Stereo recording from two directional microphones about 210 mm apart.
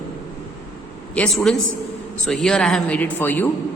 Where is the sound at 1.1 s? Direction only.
5° left (ahead or behind).